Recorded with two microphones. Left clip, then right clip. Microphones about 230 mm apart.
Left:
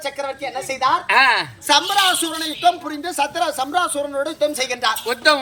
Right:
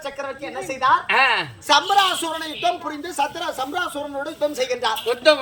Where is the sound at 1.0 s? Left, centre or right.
Centre.